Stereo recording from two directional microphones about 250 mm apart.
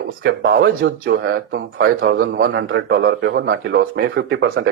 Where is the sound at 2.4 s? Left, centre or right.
Right.